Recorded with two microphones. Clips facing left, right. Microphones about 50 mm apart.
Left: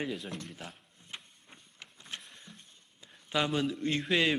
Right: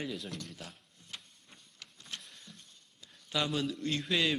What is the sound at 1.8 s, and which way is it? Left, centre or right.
Vehicle, left.